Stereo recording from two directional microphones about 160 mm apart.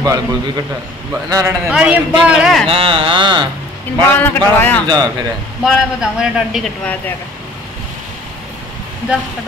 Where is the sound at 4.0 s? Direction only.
10° left (ahead or behind).